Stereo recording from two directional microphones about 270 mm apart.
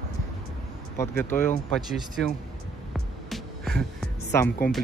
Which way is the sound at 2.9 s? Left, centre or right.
Centre.